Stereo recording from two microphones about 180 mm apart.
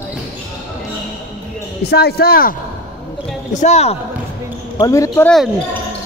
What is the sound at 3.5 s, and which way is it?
Speech, 40° left (ahead or behind).